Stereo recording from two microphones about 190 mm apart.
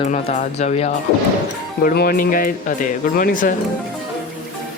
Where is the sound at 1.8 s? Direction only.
55° left (ahead or behind).